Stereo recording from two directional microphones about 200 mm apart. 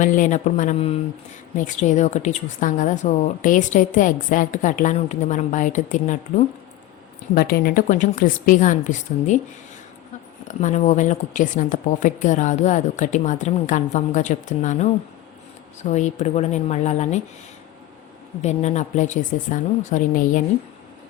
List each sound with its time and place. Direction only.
0.0 s a woman's voice: 40° left (ahead or behind)
7.3 s a woman's voice: 50° left (ahead or behind)
10.5 s a woman's voice: 40° left (ahead or behind)
18.4 s a woman's voice: 35° left (ahead or behind)